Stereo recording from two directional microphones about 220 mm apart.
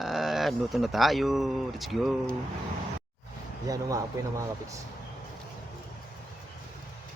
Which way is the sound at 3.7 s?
15° right (ahead or behind).